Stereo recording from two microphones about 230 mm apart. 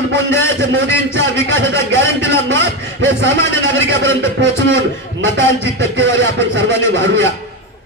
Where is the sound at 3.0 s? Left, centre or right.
Right.